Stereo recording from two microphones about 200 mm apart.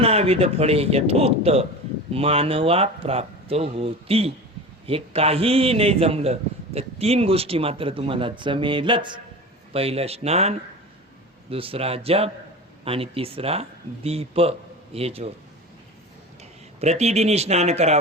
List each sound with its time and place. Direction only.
0.0 s a man's voice: 30° right (ahead or behind)
16.4 s speech: 35° right (ahead or behind)